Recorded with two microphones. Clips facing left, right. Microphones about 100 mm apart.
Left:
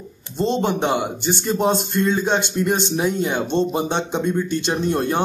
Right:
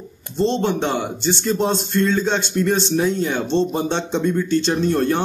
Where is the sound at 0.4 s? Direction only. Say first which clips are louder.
Right 1 dB; 10° left (ahead or behind).